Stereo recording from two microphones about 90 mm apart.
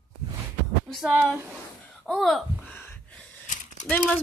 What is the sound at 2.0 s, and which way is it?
Speech, centre (ahead or behind).